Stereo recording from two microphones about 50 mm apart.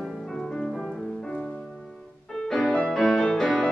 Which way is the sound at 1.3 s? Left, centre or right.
Centre.